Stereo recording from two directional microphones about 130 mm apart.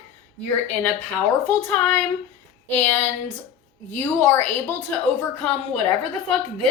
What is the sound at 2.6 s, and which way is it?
Speech, 15° left (ahead or behind).